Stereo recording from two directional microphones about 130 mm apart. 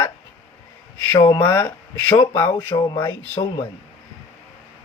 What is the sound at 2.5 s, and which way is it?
Speech, 15° left (ahead or behind).